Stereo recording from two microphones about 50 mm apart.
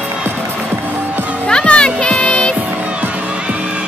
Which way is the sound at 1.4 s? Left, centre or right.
Centre.